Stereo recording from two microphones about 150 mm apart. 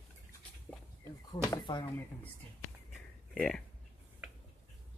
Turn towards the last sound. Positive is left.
turn(degrees=5)  # may be behind; listen again after turning